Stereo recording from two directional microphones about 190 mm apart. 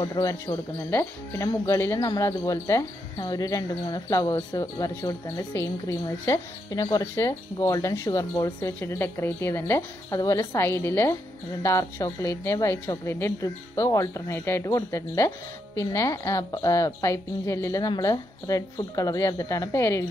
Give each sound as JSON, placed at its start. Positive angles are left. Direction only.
{"t": 0.0, "sound": "speech", "side_deg": 20}